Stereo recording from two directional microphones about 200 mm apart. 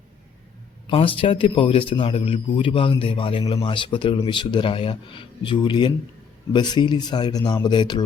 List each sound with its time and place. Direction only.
0.9 s a man's voice: 25° left (ahead or behind)